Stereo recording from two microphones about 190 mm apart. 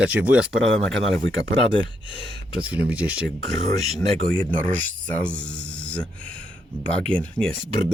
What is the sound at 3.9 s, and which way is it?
Speech, 5° left (ahead or behind).